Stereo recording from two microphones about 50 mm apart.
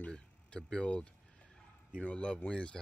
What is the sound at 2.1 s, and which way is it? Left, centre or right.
Speech, left.